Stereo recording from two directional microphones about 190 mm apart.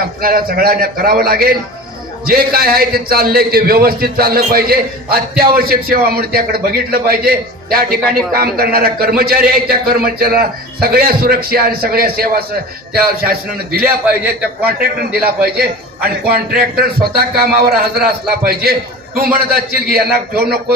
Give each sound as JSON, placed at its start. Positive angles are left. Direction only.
{"t": 0.2, "sound": "a man's voice", "side_deg": -50}
{"t": 14.0, "sound": "a man's voice", "side_deg": -10}
{"t": 15.2, "sound": "a man's voice", "side_deg": -55}